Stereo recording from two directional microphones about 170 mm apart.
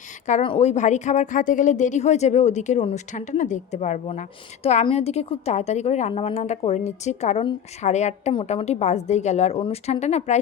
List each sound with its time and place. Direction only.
0.4 s a woman's voice: 35° left (ahead or behind)
8.3 s speech: 30° left (ahead or behind)